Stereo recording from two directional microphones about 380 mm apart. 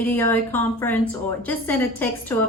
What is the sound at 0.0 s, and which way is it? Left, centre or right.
A woman's voice, centre.